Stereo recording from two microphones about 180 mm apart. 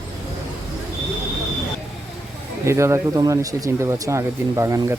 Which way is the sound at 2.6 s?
15° right (ahead or behind).